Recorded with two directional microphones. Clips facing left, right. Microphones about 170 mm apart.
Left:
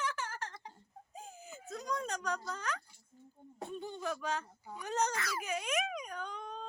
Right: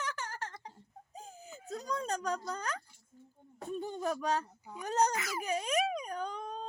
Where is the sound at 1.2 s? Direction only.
35° right (ahead or behind).